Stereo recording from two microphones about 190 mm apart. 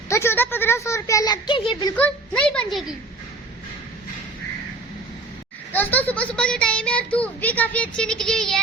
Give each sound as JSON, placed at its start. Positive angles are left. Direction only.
{"t": 0.1, "sound": "a sound", "side_deg": 15}
{"t": 2.0, "sound": "speech", "side_deg": 5}
{"t": 5.7, "sound": "a child's voice", "side_deg": 10}